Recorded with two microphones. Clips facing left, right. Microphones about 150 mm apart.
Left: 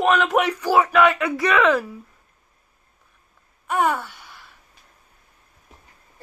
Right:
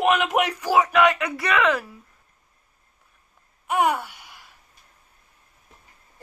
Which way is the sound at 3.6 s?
20° right (ahead or behind).